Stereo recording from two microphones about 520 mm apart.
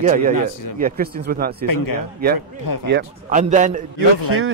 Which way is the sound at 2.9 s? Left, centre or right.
Centre.